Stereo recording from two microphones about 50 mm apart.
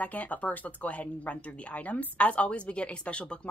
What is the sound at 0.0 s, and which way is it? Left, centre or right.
Speech, left.